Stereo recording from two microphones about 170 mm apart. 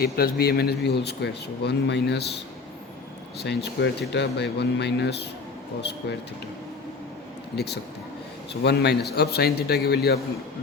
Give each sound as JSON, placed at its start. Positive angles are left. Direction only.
{"t": 0.0, "sound": "a man's voice", "side_deg": 65}
{"t": 3.4, "sound": "speech", "side_deg": 85}
{"t": 7.5, "sound": "a man's voice", "side_deg": 75}